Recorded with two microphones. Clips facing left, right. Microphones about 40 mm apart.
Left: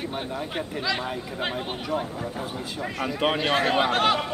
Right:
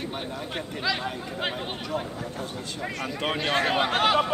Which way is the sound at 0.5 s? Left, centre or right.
Centre.